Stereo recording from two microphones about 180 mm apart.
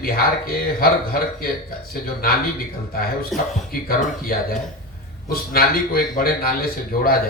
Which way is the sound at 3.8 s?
55° left (ahead or behind).